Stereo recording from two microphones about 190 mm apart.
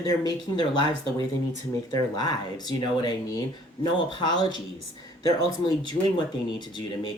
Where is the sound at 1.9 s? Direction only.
20° left (ahead or behind).